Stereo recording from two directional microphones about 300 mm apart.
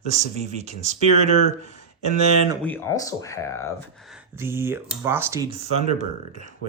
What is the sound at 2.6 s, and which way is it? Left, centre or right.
Speech, centre.